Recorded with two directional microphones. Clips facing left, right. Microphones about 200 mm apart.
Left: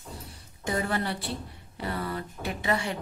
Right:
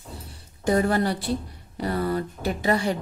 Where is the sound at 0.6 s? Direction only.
40° right (ahead or behind).